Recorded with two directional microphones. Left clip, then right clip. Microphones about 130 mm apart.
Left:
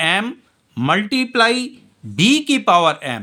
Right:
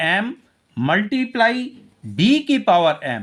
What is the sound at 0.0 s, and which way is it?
Speech, 30° left (ahead or behind).